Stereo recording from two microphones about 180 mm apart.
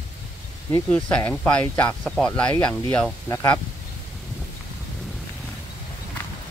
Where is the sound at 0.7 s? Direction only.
10° left (ahead or behind).